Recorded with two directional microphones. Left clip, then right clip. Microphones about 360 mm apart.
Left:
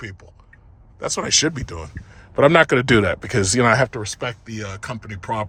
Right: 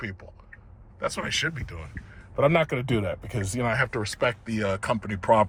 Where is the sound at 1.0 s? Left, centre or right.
Centre; by 3.3 s left.